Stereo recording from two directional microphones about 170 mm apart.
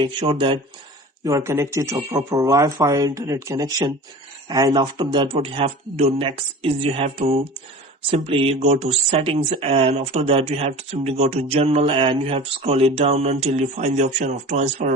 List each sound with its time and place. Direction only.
0.0 s speech: 30° right (ahead or behind)
1.2 s speech: 20° right (ahead or behind); by 14.9 s 45° right (ahead or behind)